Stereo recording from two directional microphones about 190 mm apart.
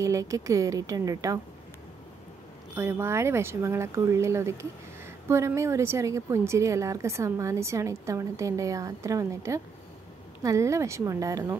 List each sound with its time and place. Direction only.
0.0 s a woman's voice: 15° right (ahead or behind)
2.7 s a woman's voice: 10° right (ahead or behind)